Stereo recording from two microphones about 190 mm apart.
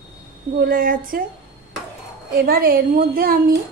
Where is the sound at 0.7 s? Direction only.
50° right (ahead or behind).